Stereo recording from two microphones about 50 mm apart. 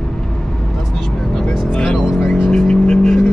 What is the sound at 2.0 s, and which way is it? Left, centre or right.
Vehicle, centre.